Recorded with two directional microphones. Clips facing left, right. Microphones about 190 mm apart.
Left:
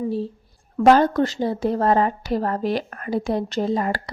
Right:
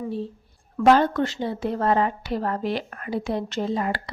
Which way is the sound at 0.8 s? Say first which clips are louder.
Left 3 dB; 40° left (ahead or behind).